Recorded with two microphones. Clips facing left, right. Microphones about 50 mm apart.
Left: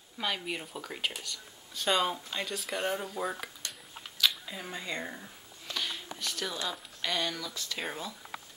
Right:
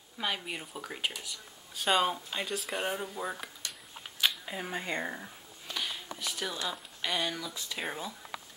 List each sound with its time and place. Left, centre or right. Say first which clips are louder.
0.2 s speech: left 1 dB; centre
4.2 s a sound: even; right
5.9 s speech: even; centre